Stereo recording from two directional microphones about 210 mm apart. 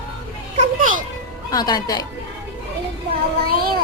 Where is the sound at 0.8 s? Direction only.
40° right (ahead or behind).